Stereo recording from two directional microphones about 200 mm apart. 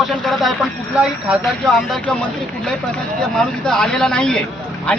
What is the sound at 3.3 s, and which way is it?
Speech, 5° left (ahead or behind).